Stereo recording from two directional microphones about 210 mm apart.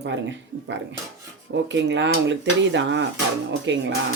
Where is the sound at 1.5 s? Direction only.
60° right (ahead or behind).